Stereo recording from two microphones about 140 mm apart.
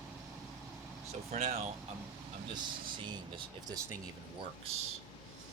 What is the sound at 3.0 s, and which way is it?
Speech, 35° right (ahead or behind).